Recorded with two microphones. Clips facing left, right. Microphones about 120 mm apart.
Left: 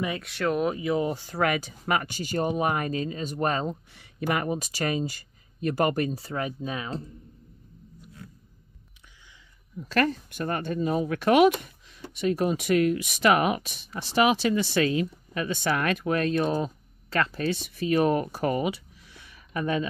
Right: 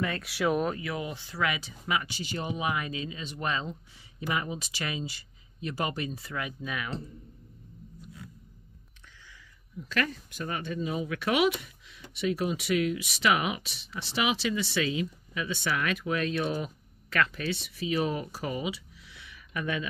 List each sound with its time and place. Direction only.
0.2 s speech: 5° right (ahead or behind)
0.7 s speech: 25° left (ahead or behind)
1.0 s speech: 45° left (ahead or behind)
3.9 s speech: 60° left (ahead or behind)
6.1 s speech: 35° left (ahead or behind)
9.8 s speech: 45° left (ahead or behind)
17.5 s speech: 45° left (ahead or behind)